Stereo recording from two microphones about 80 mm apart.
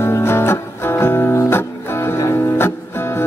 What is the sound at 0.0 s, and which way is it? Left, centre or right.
Music, left.